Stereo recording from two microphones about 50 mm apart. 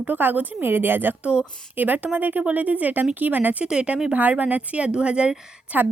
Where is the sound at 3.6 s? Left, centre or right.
Centre.